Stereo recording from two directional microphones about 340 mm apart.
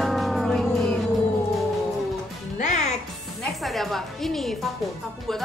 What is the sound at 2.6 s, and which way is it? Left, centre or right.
Music, left.